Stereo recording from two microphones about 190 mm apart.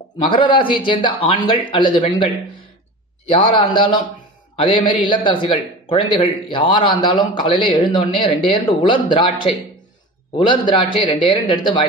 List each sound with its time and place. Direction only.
0.2 s a man's voice: 25° left (ahead or behind)
3.3 s a man's voice: 30° left (ahead or behind)
5.0 s a man's voice: 25° left (ahead or behind)